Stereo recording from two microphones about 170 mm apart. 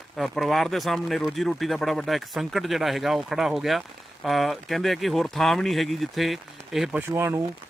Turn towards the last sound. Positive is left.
turn(degrees=-15)  # may be behind; listen again after turning